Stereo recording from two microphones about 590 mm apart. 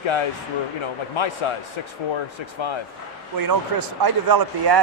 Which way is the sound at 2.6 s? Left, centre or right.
Left.